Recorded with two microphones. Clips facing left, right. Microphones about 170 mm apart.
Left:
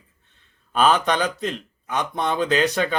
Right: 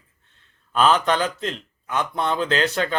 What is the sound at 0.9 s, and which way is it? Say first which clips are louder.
A man's voice: right 1 dB; 15° left (ahead or behind).